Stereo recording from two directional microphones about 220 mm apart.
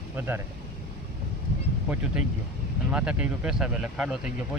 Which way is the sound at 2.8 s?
5° right (ahead or behind).